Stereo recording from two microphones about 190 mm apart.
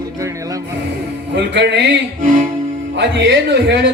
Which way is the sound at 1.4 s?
65° right (ahead or behind).